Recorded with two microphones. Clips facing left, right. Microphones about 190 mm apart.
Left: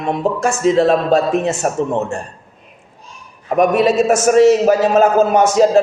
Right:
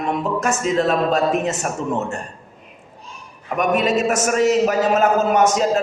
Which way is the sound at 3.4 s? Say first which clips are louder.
Left 6 dB; 30° left (ahead or behind).